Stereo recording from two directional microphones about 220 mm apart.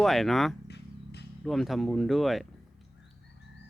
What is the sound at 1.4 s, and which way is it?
Speech, centre (ahead or behind).